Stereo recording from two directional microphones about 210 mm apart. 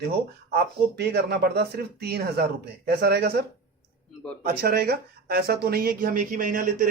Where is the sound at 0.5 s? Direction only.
50° right (ahead or behind).